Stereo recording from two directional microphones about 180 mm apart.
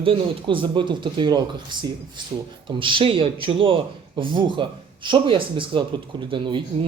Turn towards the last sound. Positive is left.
turn(degrees=-25)  # may be behind; listen again after turning